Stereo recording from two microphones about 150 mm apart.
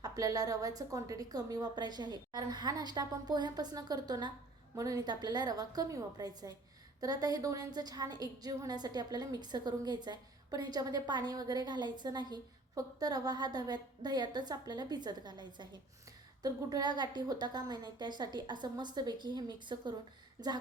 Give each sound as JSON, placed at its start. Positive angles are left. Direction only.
{"t": 0.0, "sound": "a woman's voice", "side_deg": -25}